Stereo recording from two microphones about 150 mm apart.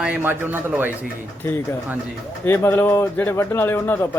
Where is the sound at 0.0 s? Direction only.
10° right (ahead or behind).